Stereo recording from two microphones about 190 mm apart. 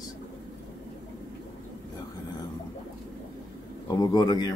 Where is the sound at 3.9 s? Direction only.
20° left (ahead or behind).